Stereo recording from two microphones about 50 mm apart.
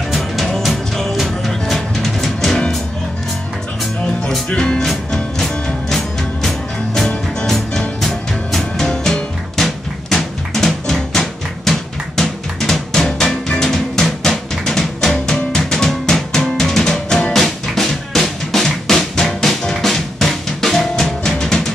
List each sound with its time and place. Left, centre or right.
0.5 s music: centre
4.5 s music: centre
13.6 s drum: centre